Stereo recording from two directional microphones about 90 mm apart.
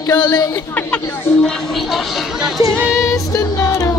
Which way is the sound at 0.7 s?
15° left (ahead or behind).